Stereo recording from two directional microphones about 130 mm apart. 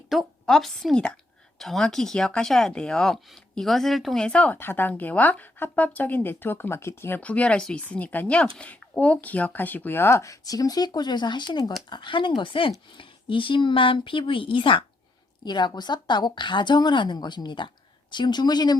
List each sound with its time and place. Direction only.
0.1 s a woman's voice: centre (ahead or behind); by 18.8 s 30° left (ahead or behind)